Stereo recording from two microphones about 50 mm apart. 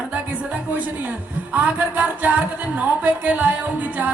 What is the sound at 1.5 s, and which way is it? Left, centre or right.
Speech, right.